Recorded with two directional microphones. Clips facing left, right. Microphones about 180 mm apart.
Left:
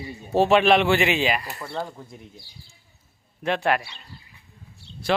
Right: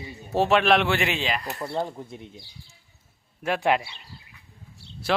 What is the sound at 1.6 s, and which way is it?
Speech, 20° right (ahead or behind).